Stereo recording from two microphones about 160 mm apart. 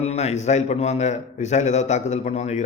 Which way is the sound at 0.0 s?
40° left (ahead or behind).